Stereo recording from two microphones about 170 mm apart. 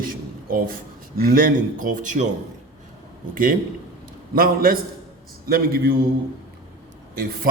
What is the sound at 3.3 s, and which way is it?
A man's voice, 55° right (ahead or behind).